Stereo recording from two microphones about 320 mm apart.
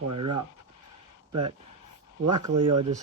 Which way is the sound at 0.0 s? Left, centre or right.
Right.